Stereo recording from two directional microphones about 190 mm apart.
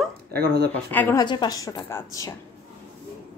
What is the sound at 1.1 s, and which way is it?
A woman's voice, 25° left (ahead or behind).